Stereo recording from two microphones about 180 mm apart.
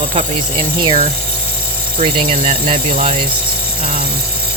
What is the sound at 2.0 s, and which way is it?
Speech, 45° right (ahead or behind).